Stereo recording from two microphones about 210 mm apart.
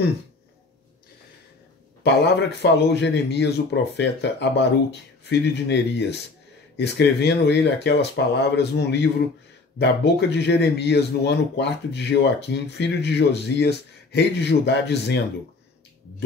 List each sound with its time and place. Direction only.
2.2 s speech: 50° left (ahead or behind)